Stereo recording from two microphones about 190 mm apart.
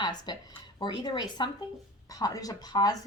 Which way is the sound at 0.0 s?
20° left (ahead or behind).